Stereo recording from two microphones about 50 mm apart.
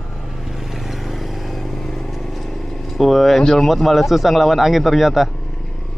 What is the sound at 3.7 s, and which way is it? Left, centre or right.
Speech, centre.